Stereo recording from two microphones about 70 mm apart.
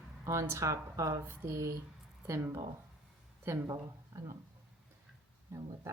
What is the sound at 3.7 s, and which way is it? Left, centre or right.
Speech, right.